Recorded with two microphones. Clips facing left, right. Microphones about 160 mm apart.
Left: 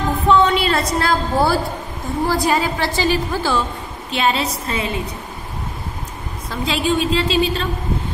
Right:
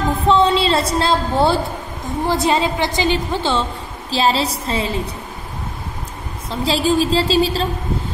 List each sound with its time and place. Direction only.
0.3 s a sound: 30° right (ahead or behind)
2.2 s a woman's voice: 25° right (ahead or behind)
6.5 s a woman's voice: 35° right (ahead or behind)